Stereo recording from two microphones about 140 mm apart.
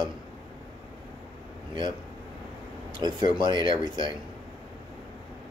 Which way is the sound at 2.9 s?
30° right (ahead or behind).